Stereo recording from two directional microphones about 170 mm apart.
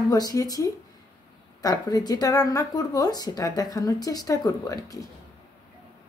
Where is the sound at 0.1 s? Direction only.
20° left (ahead or behind).